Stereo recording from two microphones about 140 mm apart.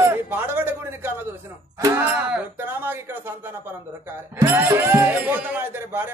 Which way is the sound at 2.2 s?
10° right (ahead or behind).